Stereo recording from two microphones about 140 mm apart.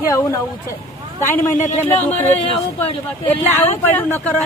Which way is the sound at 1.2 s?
20° left (ahead or behind).